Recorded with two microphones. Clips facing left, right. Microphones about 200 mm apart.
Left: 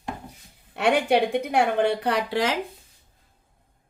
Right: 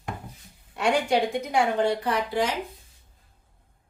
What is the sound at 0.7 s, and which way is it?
A woman's voice, 65° left (ahead or behind).